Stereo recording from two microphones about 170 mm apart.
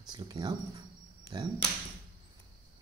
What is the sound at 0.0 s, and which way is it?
Speech, 25° right (ahead or behind).